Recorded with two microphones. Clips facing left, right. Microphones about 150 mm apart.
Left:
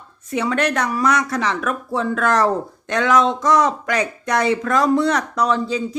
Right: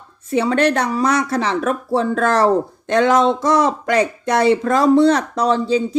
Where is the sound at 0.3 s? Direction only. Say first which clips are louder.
Right 4 dB; 30° right (ahead or behind).